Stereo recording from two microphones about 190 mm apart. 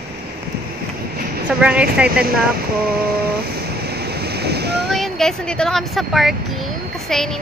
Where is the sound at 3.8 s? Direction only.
55° right (ahead or behind).